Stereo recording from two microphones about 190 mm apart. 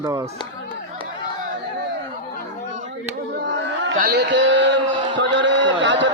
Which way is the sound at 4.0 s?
60° right (ahead or behind).